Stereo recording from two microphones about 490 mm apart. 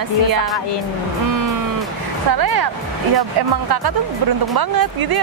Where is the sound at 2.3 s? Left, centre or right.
Right.